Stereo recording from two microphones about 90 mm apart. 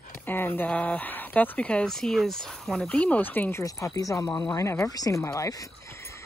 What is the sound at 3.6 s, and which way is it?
Speech, 35° left (ahead or behind).